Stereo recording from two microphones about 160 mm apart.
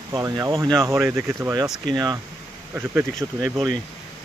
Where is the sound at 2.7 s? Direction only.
15° right (ahead or behind).